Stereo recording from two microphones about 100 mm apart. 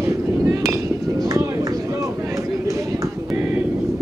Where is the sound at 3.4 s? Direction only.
20° right (ahead or behind).